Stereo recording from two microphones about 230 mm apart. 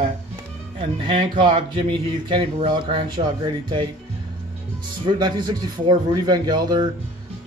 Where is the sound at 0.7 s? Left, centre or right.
Right.